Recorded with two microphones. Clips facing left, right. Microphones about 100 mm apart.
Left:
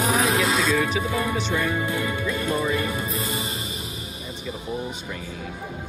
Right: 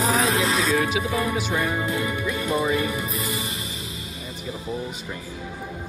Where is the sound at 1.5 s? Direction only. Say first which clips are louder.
Even; 25° right (ahead or behind).